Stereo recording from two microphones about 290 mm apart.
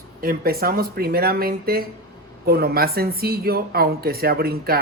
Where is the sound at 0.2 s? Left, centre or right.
Right.